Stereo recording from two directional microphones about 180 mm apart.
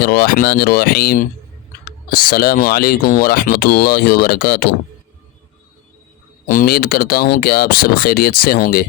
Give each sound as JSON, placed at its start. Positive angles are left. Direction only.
{"t": 0.0, "sound": "speech", "side_deg": 60}
{"t": 6.5, "sound": "speech", "side_deg": 55}